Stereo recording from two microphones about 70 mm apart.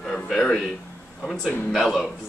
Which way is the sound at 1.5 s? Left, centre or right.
Centre.